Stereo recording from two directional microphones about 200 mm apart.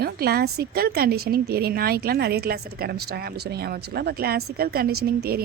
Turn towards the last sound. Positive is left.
turn(degrees=-50)  # may be behind; listen again after turning